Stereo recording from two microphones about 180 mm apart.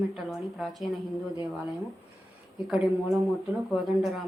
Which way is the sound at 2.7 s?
5° right (ahead or behind).